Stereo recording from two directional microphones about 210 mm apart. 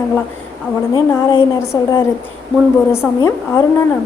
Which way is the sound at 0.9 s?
15° left (ahead or behind).